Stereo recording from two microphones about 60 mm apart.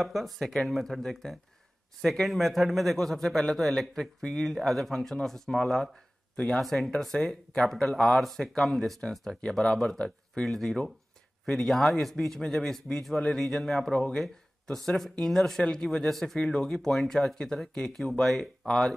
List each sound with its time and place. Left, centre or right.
0.0 s a man's voice: centre
6.6 s a man's voice: centre
8.2 s a man's voice: centre